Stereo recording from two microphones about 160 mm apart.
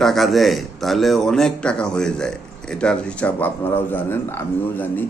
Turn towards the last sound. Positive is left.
turn(degrees=10)  # may be behind; listen again after turning